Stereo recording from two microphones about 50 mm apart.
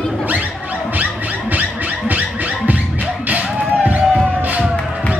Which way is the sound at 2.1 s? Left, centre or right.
Right.